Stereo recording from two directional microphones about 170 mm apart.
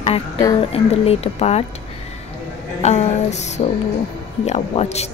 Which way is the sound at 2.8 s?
40° left (ahead or behind).